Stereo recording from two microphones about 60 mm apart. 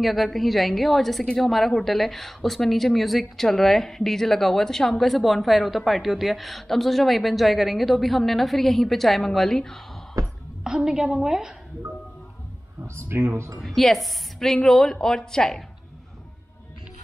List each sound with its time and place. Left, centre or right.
0.0 s a woman's voice: centre
10.2 s a sound: right
10.6 s a woman's voice: centre
12.8 s speech: right
13.6 s a woman's voice: centre